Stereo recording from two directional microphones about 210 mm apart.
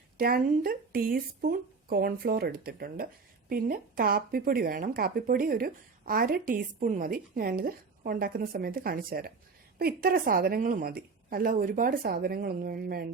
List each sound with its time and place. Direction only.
0.2 s speech: 45° right (ahead or behind)